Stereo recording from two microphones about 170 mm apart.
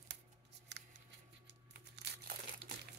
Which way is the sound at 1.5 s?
75° right (ahead or behind).